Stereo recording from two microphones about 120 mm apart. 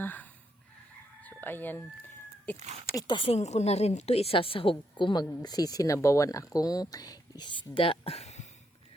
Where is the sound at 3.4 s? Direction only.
65° left (ahead or behind); by 7.7 s 35° left (ahead or behind).